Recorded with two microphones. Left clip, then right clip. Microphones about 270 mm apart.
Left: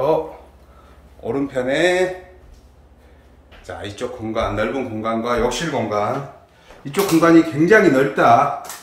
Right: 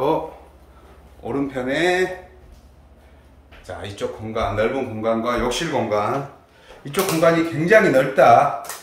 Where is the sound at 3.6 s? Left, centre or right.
Centre.